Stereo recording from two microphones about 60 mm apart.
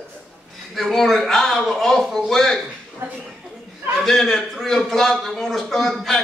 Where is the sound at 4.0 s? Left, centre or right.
Centre.